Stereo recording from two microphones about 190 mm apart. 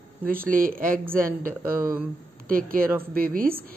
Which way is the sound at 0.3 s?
50° right (ahead or behind).